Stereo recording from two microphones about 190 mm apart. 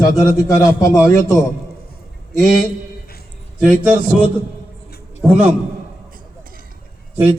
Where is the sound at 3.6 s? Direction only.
5° right (ahead or behind).